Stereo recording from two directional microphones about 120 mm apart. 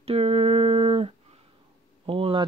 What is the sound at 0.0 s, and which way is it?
Humming, 55° right (ahead or behind).